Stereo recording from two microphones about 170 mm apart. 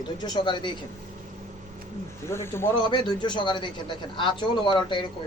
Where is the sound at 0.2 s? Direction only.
25° left (ahead or behind).